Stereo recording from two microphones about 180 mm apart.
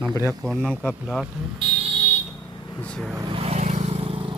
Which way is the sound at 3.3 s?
35° right (ahead or behind).